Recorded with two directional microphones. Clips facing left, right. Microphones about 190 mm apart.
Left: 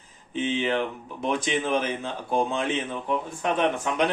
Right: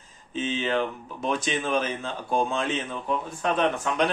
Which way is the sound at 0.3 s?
15° left (ahead or behind).